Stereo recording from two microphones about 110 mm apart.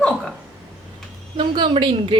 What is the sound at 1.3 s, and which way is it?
Speech, 50° right (ahead or behind).